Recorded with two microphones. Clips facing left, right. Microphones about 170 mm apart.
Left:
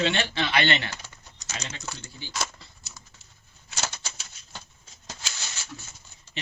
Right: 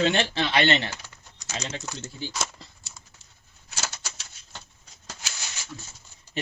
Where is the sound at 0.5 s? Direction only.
30° right (ahead or behind).